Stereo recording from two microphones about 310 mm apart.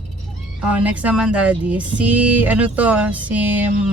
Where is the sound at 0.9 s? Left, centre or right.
Centre.